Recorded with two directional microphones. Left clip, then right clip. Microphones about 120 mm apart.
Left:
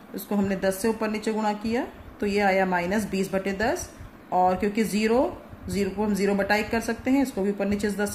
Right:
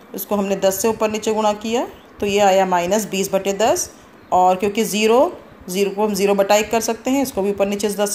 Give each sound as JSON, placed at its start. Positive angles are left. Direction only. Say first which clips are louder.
{"t": 0.1, "sound": "a woman's voice", "louder": "right 8 dB", "side_deg": -20}